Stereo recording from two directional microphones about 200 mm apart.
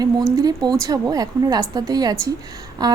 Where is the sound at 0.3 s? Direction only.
20° right (ahead or behind).